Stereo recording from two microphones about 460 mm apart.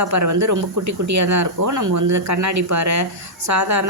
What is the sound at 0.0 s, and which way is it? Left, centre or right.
Speech, right.